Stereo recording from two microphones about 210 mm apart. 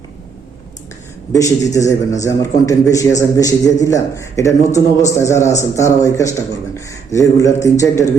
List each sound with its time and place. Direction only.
1.3 s a man's voice: 15° left (ahead or behind)